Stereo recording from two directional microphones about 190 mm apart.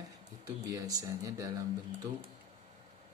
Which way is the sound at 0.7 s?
20° right (ahead or behind).